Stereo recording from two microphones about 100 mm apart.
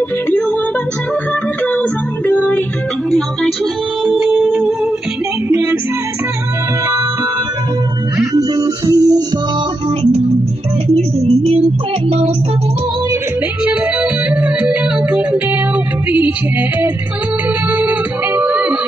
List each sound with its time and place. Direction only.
1.8 s music: 15° left (ahead or behind)
4.0 s music: 5° right (ahead or behind)
5.5 s music: 25° right (ahead or behind)
8.4 s music: 35° right (ahead or behind)
11.0 s music: 70° right (ahead or behind)
14.3 s music: 15° right (ahead or behind)
17.7 s music: 20° right (ahead or behind)